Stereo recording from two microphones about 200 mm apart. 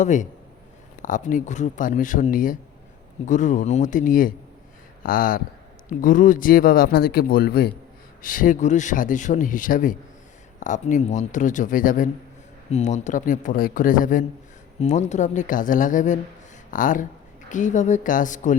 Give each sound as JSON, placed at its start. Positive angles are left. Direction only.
{"t": 0.0, "sound": "a man's voice", "side_deg": 40}